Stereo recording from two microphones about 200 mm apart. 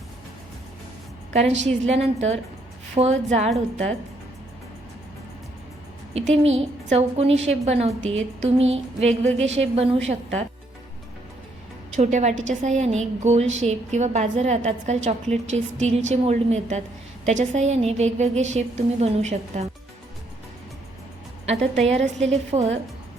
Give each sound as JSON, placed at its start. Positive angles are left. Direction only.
{"t": 1.3, "sound": "a woman's voice", "side_deg": -35}
{"t": 6.1, "sound": "a woman's voice", "side_deg": -30}
{"t": 11.9, "sound": "a woman's voice", "side_deg": -35}
{"t": 21.4, "sound": "a woman's voice", "side_deg": -30}